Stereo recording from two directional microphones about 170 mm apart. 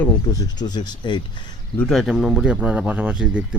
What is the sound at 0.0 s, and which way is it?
Speech, 20° left (ahead or behind).